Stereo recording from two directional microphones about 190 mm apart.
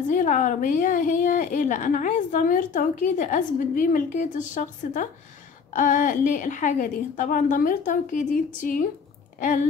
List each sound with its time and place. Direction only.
0.1 s a woman's voice: 45° left (ahead or behind)